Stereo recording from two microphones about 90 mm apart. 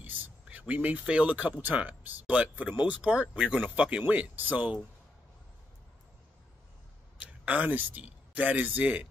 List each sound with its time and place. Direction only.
0.0 s a sound: 15° right (ahead or behind)
1.6 s speech: 20° right (ahead or behind)
7.2 s speech: 15° right (ahead or behind)